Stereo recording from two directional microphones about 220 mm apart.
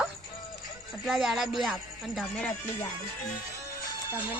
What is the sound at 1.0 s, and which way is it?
A woman's voice, centre (ahead or behind).